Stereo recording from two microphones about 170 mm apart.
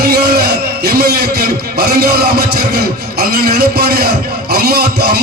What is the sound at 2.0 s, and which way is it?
A man's voice, 65° right (ahead or behind).